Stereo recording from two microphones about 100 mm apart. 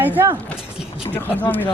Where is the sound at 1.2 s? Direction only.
15° left (ahead or behind).